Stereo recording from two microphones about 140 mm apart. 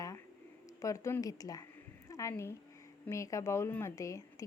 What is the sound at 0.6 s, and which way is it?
A woman's voice, 25° left (ahead or behind).